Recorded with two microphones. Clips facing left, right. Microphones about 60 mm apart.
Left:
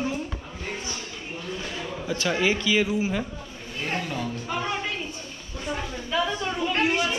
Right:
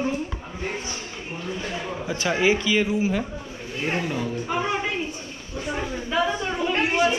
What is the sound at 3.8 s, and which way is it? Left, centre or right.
A woman's voice, centre.